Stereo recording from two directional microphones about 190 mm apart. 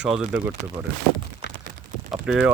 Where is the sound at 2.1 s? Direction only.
5° right (ahead or behind).